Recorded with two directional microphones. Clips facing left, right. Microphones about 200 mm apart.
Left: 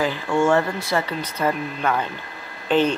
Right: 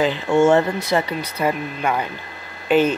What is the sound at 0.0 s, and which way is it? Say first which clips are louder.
Speech: right 4 dB; 20° right (ahead or behind).